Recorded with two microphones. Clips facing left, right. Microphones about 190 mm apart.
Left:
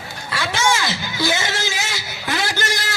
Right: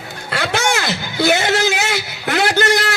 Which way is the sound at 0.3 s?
60° right (ahead or behind).